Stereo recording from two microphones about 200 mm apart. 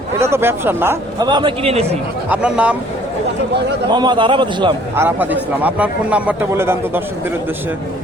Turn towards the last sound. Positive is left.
turn(degrees=-10)  # may be behind; listen again after turning